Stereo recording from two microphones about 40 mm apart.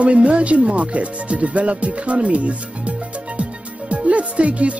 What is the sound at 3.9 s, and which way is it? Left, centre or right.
Speech, right.